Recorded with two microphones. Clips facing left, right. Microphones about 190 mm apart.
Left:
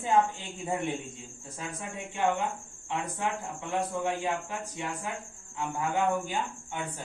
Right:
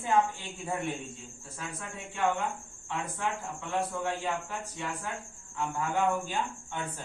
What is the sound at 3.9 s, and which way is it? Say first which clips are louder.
Speech: left 2 dB; 15° left (ahead or behind).